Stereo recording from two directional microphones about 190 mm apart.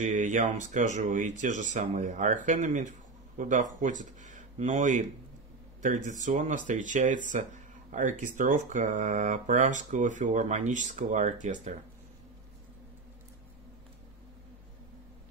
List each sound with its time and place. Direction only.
0.0 s speech: 40° right (ahead or behind)